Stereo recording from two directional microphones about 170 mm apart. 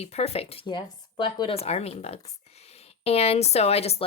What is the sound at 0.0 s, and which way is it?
Speech, 35° left (ahead or behind).